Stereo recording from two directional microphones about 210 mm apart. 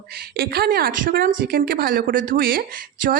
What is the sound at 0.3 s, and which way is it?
A woman's voice, 45° right (ahead or behind).